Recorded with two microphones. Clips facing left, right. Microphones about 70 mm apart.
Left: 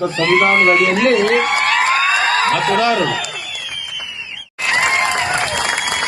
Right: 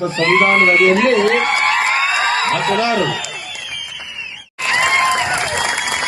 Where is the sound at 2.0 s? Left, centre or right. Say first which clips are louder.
Left 1 dB; left.